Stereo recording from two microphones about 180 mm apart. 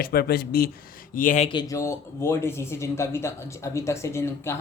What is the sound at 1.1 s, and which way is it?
Speech, 45° left (ahead or behind).